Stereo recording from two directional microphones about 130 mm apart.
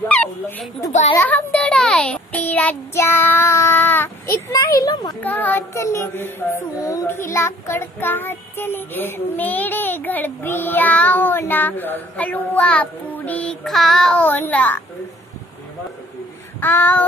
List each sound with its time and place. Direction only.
0.1 s bow-wow: 10° left (ahead or behind)
1.1 s a child's voice: 15° left (ahead or behind); by 5.1 s 30° left (ahead or behind)
5.2 s music: 15° left (ahead or behind)
16.5 s music: 15° left (ahead or behind)